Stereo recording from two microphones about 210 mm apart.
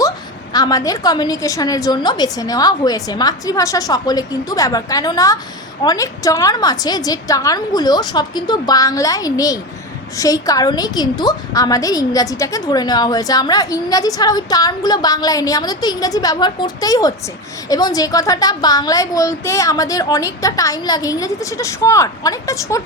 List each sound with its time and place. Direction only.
0.5 s a woman's voice: 20° left (ahead or behind)